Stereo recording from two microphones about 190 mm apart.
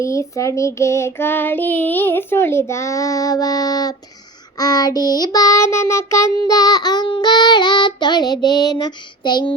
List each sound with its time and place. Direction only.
0.0 s child singing: 15° left (ahead or behind)